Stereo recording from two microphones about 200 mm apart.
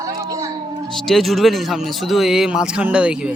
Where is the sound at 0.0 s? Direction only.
15° right (ahead or behind).